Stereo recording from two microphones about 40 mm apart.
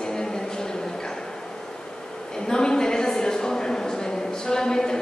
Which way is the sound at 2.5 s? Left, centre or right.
Centre.